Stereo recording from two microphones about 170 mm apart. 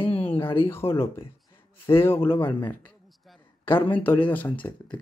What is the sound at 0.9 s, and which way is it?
Speech, 35° left (ahead or behind).